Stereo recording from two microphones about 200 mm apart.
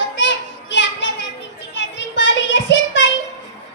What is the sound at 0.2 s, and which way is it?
Children playing, 65° left (ahead or behind).